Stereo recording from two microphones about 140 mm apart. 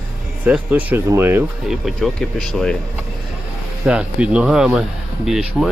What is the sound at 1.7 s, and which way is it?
Speech, centre (ahead or behind).